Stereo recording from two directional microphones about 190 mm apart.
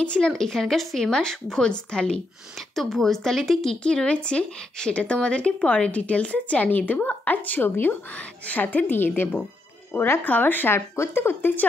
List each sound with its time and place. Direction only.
0.0 s speech: 5° left (ahead or behind)